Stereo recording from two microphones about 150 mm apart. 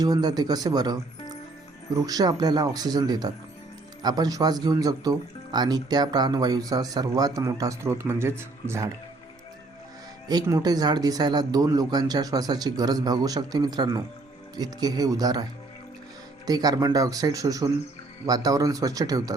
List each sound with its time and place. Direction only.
0.0 s speech: 25° right (ahead or behind)
10.2 s speech: 25° right (ahead or behind)
16.5 s speech: 25° right (ahead or behind)